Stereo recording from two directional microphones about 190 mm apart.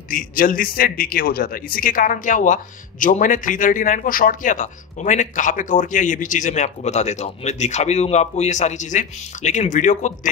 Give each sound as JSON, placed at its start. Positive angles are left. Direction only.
{"t": 0.1, "sound": "a man's voice", "side_deg": 45}